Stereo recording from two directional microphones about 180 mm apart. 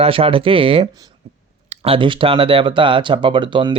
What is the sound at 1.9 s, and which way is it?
Speech, 30° right (ahead or behind).